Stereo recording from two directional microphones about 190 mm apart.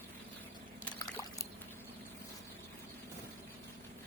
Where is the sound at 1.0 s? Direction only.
15° left (ahead or behind).